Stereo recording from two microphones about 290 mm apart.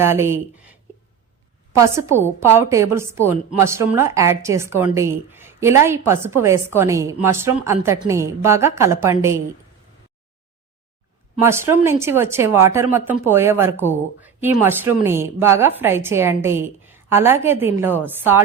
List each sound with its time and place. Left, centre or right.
0.0 s a woman's voice: centre
11.3 s a woman's voice: centre